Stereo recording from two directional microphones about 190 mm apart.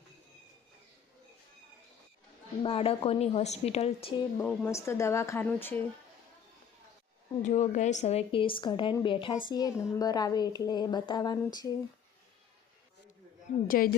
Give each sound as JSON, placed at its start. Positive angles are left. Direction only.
{"t": 2.6, "sound": "a woman's voice", "side_deg": 30}
{"t": 4.4, "sound": "speech", "side_deg": 10}
{"t": 7.4, "sound": "a woman's voice", "side_deg": 40}
{"t": 13.7, "sound": "a woman's voice", "side_deg": 50}